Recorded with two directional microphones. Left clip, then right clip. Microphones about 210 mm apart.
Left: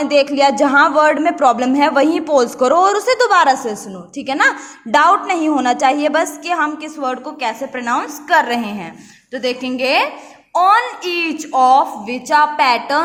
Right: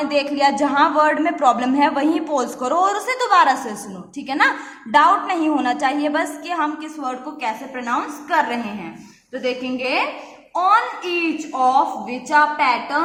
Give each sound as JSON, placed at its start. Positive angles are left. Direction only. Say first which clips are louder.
{"t": 0.0, "sound": "a woman's voice", "louder": "left 5 dB", "side_deg": 25}